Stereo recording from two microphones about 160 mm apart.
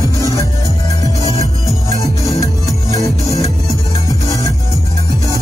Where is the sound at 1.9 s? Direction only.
20° left (ahead or behind).